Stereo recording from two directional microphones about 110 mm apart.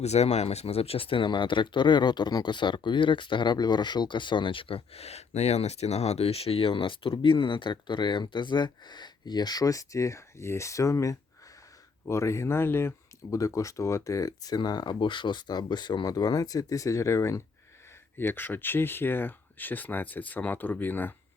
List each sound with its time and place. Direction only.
0.0 s speech: 80° left; by 21.1 s 15° left (ahead or behind)